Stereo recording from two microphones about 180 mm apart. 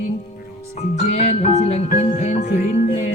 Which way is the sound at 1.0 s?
40° left (ahead or behind).